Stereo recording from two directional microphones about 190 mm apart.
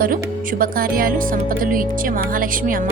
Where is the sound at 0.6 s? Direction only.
50° right (ahead or behind).